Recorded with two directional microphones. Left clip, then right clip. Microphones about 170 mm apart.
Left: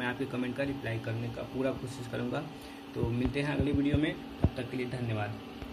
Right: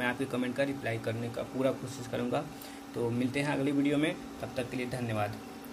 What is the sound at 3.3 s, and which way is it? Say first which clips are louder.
Speech: right 1 dB; 50° right (ahead or behind).